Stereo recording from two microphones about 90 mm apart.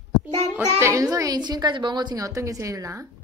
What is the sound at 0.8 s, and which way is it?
Speech, 30° right (ahead or behind).